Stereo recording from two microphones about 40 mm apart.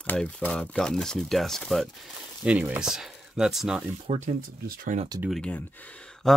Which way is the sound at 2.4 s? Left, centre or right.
Right.